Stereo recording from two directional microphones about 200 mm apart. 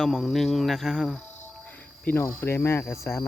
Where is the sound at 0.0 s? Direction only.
Centre (ahead or behind).